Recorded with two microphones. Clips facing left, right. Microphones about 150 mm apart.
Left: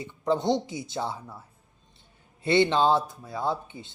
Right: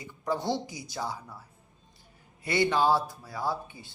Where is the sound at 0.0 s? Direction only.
20° left (ahead or behind).